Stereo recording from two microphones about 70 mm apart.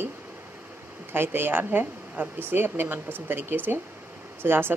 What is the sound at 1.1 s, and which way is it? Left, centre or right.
Speech, right.